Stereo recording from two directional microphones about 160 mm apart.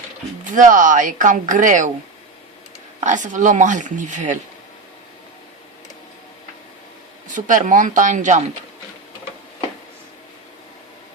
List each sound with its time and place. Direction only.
0.4 s speech: 55° right (ahead or behind)
3.0 s speech: 50° right (ahead or behind)
7.3 s speech: 55° right (ahead or behind)